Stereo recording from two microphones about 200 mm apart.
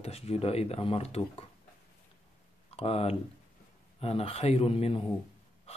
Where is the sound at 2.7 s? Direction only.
30° left (ahead or behind).